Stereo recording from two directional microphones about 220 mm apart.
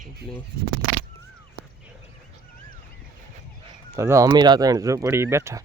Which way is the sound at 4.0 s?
10° right (ahead or behind).